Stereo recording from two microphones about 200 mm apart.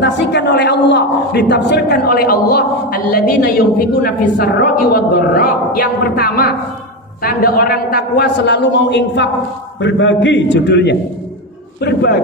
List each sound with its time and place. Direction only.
0.0 s a man's voice: 60° left (ahead or behind)